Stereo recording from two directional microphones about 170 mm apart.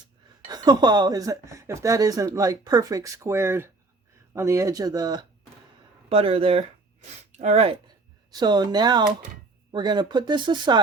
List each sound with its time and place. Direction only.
0.4 s a woman's voice: 25° right (ahead or behind)
6.1 s speech: 35° right (ahead or behind)
8.3 s a woman's voice: 25° right (ahead or behind)